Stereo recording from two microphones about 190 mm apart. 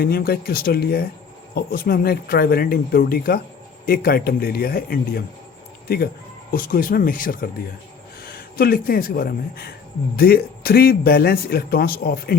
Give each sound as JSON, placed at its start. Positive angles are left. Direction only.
{"t": 0.0, "sound": "a man's voice", "side_deg": 55}
{"t": 6.5, "sound": "a man's voice", "side_deg": 50}